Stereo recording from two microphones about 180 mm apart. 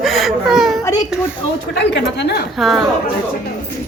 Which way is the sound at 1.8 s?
70° left (ahead or behind).